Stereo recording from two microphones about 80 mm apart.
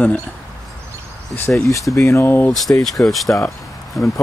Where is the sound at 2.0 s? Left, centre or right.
Left.